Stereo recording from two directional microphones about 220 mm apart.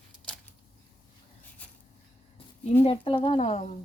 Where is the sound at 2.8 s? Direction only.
25° left (ahead or behind).